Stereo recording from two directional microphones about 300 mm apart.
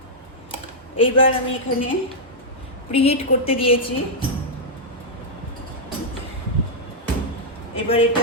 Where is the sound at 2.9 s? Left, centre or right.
Centre.